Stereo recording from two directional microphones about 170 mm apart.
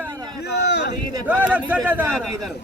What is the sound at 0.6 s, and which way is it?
Speech, 80° left.